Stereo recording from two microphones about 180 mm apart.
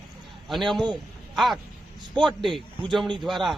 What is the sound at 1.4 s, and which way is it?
A man's voice, centre (ahead or behind).